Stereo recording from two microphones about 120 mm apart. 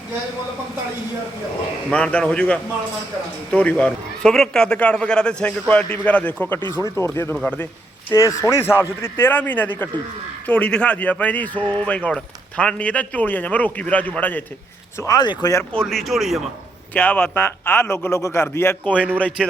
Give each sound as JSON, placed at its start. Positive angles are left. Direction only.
{"t": 1.9, "sound": "a man's voice", "side_deg": 10}
{"t": 7.3, "sound": "speech", "side_deg": 5}
{"t": 8.1, "sound": "a man's voice", "side_deg": 25}
{"t": 14.9, "sound": "a man's voice", "side_deg": 30}
{"t": 15.7, "sound": "speech", "side_deg": 5}
{"t": 16.9, "sound": "a man's voice", "side_deg": 15}